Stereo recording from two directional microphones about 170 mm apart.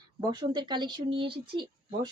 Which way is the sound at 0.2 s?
25° right (ahead or behind).